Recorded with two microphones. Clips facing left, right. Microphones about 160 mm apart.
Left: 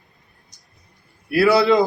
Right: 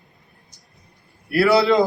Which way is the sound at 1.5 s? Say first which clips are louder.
Left 1 dB; 25° right (ahead or behind).